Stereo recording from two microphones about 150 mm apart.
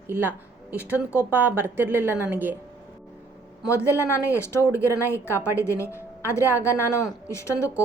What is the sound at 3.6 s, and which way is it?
A woman's voice, 20° left (ahead or behind).